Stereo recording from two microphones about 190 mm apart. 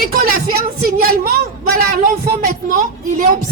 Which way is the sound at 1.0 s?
55° right (ahead or behind).